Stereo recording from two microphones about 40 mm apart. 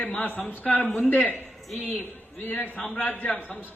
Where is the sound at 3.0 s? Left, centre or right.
Left.